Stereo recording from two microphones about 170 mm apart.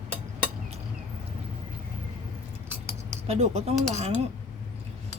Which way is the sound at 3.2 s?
40° right (ahead or behind).